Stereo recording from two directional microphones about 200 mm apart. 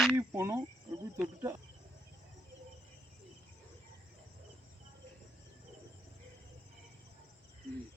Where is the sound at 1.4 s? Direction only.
15° right (ahead or behind).